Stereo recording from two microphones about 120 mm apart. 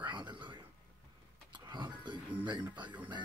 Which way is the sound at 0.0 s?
40° right (ahead or behind).